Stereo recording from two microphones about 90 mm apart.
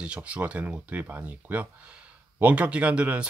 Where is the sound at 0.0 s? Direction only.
15° right (ahead or behind).